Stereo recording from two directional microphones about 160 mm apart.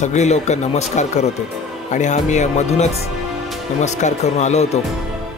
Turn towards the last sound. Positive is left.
turn(degrees=45)  # may be behind; listen again after turning